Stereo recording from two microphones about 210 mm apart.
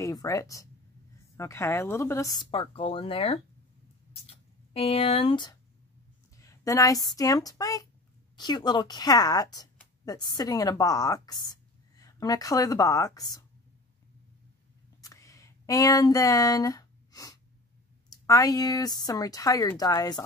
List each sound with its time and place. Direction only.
0.0 s speech: 15° left (ahead or behind)
4.7 s a woman's voice: 25° left (ahead or behind)
15.0 s a sound: 15° left (ahead or behind)
18.1 s speech: 15° left (ahead or behind)